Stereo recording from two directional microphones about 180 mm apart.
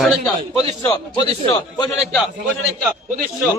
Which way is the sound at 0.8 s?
20° left (ahead or behind).